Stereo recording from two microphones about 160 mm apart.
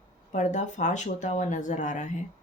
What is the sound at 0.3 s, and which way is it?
Speech, 50° left (ahead or behind).